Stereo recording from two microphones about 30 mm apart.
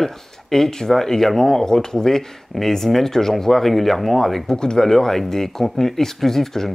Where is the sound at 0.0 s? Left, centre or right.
Centre.